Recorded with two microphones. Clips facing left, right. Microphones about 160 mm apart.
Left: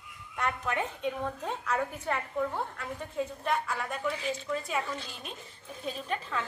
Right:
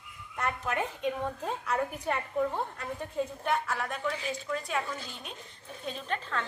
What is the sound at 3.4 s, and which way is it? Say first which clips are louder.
A woman's voice: even; 5° right (ahead or behind).